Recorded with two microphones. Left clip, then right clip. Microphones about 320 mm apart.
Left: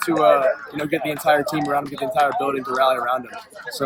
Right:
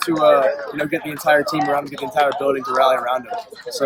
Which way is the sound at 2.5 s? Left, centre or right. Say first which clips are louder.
Right 3 dB; centre.